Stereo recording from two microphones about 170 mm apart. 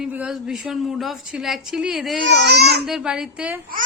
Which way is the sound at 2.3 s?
90° right.